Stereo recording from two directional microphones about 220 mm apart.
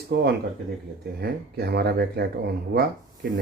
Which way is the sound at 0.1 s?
50° right (ahead or behind).